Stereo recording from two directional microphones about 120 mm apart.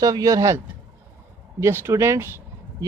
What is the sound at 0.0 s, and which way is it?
Speech, 30° right (ahead or behind).